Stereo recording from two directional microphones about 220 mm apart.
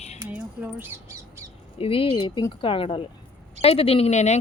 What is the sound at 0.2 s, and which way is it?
Squawk, 5° right (ahead or behind).